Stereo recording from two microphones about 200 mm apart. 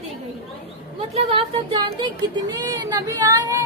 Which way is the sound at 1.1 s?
30° right (ahead or behind).